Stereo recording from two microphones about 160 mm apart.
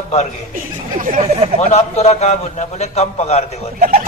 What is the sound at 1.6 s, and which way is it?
A man's voice, 45° left (ahead or behind).